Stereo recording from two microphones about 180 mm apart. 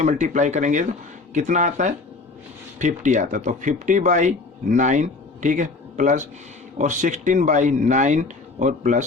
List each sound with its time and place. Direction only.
0.0 s speech: 45° right (ahead or behind)